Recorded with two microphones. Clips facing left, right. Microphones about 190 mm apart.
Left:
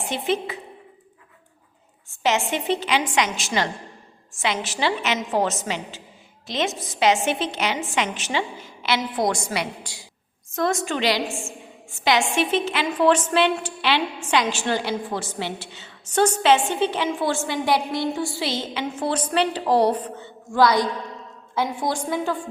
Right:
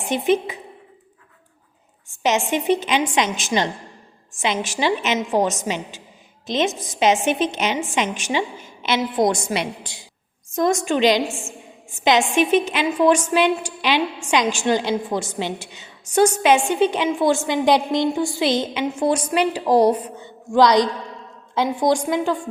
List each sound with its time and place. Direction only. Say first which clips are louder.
0.1 s a woman's voice: right 6 dB; 15° right (ahead or behind)
2.2 s a woman's voice: right 3 dB; 15° right (ahead or behind)